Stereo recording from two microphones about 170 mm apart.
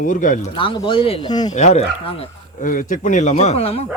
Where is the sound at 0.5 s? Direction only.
30° left (ahead or behind).